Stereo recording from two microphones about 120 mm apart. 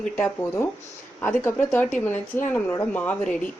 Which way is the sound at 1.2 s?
15° left (ahead or behind).